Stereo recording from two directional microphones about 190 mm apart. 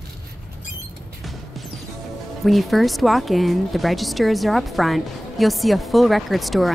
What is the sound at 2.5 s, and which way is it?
Speech, centre (ahead or behind).